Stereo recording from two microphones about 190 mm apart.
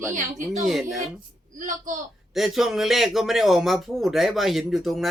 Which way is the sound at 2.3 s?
Centre (ahead or behind).